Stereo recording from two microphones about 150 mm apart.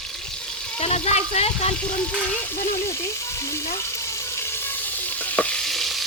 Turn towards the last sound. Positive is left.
turn(degrees=0)  # may be behind; listen again after turning